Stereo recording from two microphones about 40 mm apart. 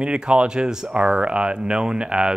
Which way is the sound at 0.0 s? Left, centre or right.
Right.